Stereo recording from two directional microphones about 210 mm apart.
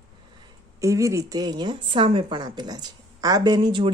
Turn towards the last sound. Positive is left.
turn(degrees=-20)  # may be behind; listen again after turning